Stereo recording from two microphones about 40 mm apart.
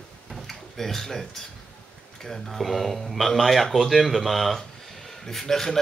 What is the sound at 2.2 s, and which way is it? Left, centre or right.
Speech, centre.